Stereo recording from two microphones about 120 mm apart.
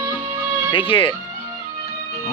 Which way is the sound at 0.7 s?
45° left (ahead or behind).